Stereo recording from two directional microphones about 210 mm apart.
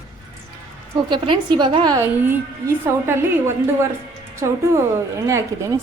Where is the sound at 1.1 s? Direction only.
20° right (ahead or behind).